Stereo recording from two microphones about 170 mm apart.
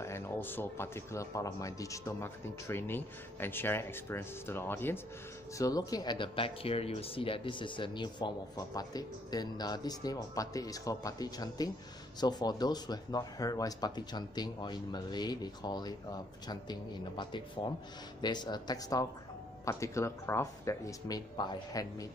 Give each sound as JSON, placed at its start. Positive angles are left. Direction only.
{"t": 0.0, "sound": "speech", "side_deg": 15}
{"t": 17.2, "sound": "speech", "side_deg": 30}